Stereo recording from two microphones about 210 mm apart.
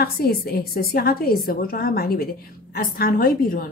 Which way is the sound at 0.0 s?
50° left (ahead or behind).